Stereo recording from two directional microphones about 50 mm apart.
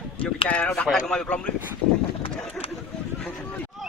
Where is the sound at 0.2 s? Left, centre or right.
Left.